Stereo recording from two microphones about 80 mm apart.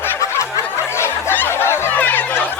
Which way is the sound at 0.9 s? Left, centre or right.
Left.